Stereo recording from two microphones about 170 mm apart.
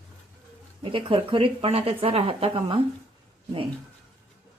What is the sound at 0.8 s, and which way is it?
A woman's voice, 30° right (ahead or behind).